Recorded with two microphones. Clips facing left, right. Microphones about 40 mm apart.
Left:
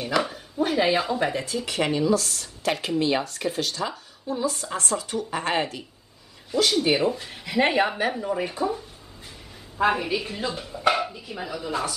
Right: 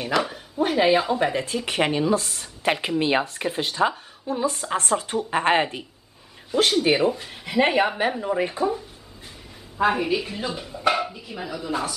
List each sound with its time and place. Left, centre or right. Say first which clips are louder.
0.0 s speech: right 1 dB; centre
0.3 s speech: right 1 dB; right
1.3 s speech: right 2 dB; right
7.1 s a woman's voice: right 1 dB; centre
8.2 s speech: right 3 dB; right
9.8 s a woman's voice: right 1 dB; centre